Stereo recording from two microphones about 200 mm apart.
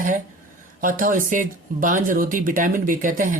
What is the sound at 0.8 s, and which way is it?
Speech, 45° right (ahead or behind).